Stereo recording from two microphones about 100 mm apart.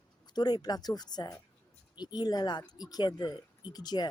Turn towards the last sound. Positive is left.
turn(degrees=45)  # may be behind; listen again after turning